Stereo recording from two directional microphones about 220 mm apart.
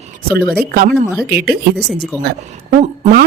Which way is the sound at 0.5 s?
45° right (ahead or behind).